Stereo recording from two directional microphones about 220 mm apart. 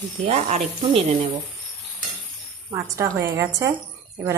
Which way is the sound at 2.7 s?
15° right (ahead or behind).